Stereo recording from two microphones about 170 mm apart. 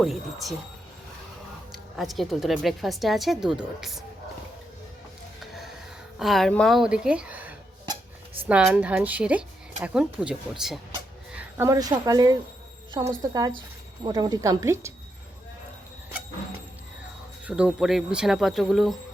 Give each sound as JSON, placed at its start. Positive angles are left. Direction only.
{"t": 0.0, "sound": "speech", "side_deg": 0}
{"t": 1.7, "sound": "speech", "side_deg": 0}
{"t": 6.1, "sound": "a woman's voice", "side_deg": 0}
{"t": 11.3, "sound": "speech", "side_deg": -15}
{"t": 17.4, "sound": "speech", "side_deg": -5}